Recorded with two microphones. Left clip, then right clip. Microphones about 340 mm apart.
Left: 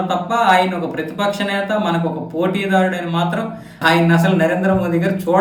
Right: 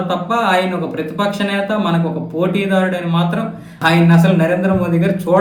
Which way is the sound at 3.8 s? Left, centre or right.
Centre.